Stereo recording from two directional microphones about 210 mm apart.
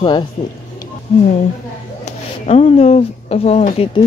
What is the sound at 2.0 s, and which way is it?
Speech, 30° left (ahead or behind).